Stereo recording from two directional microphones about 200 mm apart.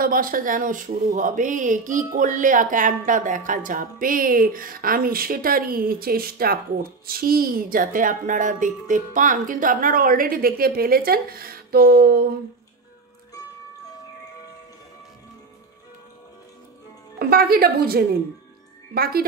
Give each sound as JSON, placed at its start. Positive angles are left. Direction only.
{"t": 0.0, "sound": "speech", "side_deg": -45}
{"t": 17.2, "sound": "speech", "side_deg": -50}